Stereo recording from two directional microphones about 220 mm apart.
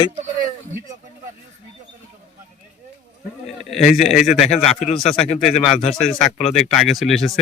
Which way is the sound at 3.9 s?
Centre (ahead or behind).